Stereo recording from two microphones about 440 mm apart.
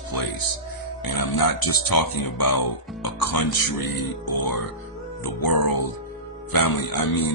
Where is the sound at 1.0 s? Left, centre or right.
Left.